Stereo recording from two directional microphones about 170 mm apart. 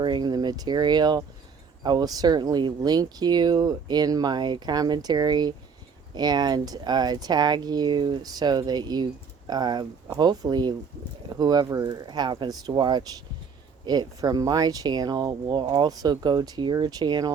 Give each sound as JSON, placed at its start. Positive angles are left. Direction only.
{"t": 0.0, "sound": "speech", "side_deg": -25}